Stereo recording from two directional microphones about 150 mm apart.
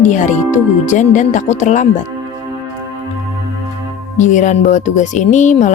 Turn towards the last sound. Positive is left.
turn(degrees=55)  # may be behind; listen again after turning